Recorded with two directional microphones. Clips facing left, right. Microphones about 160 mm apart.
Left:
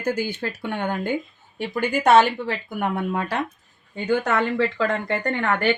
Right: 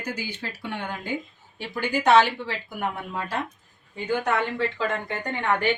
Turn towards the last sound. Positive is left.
turn(degrees=75)  # may be behind; listen again after turning